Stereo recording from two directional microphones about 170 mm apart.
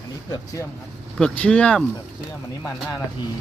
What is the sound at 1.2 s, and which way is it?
Speech, 5° left (ahead or behind).